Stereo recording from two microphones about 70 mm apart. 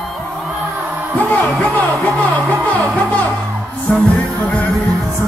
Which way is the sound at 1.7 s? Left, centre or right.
Left.